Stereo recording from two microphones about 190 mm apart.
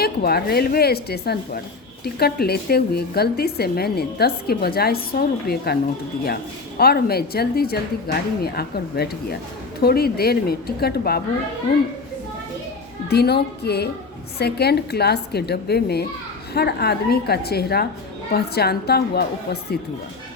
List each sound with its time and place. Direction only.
0.0 s speech: 55° left (ahead or behind)
13.1 s speech: 60° left (ahead or behind)